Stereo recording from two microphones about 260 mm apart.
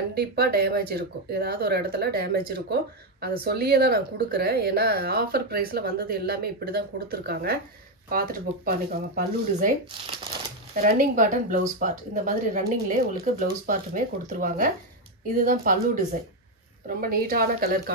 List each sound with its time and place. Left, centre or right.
0.1 s speech: right
10.8 s speech: right